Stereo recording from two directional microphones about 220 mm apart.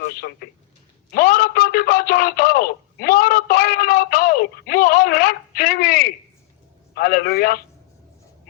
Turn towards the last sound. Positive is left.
turn(degrees=45)  # may be behind; listen again after turning